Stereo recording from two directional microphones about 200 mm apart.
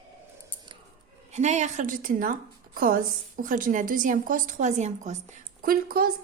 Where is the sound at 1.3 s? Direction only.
35° right (ahead or behind).